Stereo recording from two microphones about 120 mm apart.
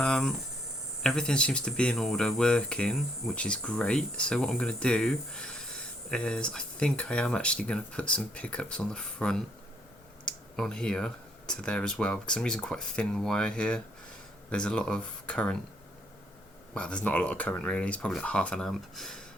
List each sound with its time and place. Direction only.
0.0 s hum: 5° left (ahead or behind)
1.0 s speech: 5° left (ahead or behind)
16.7 s speech: 10° left (ahead or behind)